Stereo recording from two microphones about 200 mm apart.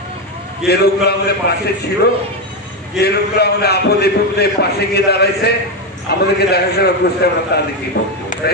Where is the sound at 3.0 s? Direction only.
55° left (ahead or behind).